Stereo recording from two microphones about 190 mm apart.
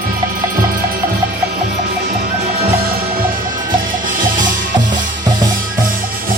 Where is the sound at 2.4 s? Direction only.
50° right (ahead or behind).